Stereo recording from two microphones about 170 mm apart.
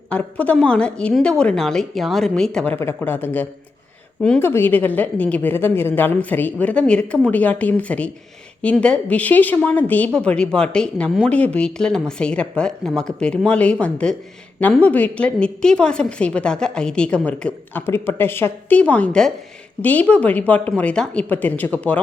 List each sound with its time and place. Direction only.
0.1 s a woman's voice: 5° left (ahead or behind)